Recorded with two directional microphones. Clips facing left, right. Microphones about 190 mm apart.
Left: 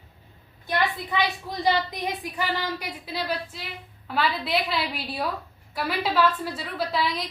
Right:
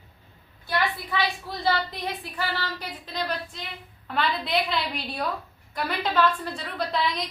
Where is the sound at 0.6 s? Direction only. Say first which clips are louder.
Left 1 dB; 20° left (ahead or behind).